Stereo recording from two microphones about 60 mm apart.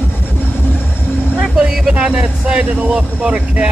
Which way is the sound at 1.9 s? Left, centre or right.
Centre.